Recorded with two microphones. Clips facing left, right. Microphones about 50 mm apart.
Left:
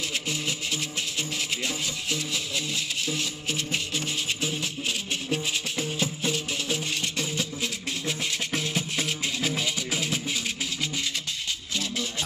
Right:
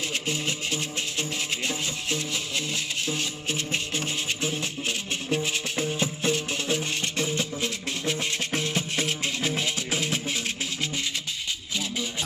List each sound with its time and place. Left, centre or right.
0.3 s music: right